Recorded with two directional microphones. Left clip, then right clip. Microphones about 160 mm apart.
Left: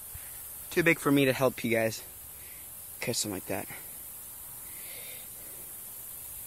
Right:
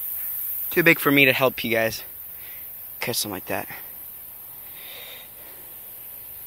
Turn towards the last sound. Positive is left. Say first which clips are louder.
# right 7 dB
turn(degrees=0)  # may be behind; listen again after turning